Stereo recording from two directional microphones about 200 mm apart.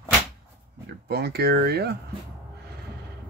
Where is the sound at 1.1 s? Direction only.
55° right (ahead or behind).